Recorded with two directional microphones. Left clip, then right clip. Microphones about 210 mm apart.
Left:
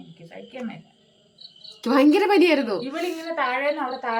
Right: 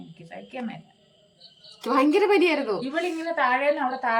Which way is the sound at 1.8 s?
20° left (ahead or behind).